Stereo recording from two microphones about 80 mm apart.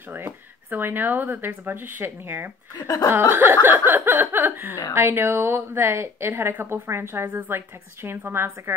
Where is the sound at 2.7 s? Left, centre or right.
Left.